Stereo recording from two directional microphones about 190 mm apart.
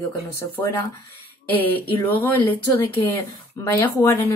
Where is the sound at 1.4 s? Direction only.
10° left (ahead or behind).